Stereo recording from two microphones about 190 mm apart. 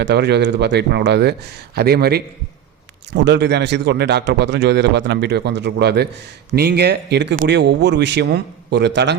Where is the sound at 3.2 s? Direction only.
60° right (ahead or behind).